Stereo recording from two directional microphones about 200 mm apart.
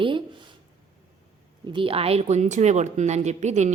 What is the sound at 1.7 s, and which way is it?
Speech, 25° right (ahead or behind).